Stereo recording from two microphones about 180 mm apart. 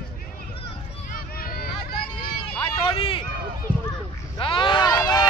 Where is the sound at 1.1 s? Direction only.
55° left (ahead or behind).